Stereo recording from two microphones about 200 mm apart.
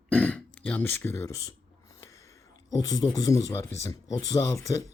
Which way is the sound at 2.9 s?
20° left (ahead or behind).